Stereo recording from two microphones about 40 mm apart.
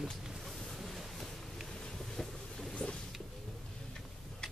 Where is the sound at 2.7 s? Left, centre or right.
Left.